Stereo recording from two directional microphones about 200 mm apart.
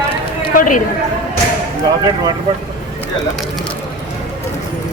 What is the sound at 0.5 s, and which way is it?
Speech, 40° left (ahead or behind).